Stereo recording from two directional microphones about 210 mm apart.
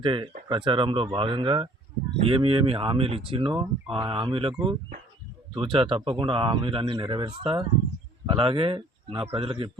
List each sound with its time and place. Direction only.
0.0 s speech: 25° right (ahead or behind)
5.5 s speech: 25° right (ahead or behind)